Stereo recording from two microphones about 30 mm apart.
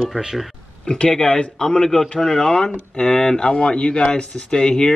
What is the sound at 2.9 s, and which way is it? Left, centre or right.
Speech, left.